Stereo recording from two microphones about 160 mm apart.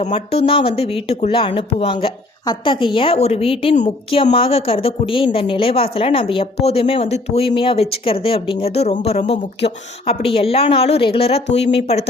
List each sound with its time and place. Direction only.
0.0 s a woman's voice: 40° left (ahead or behind)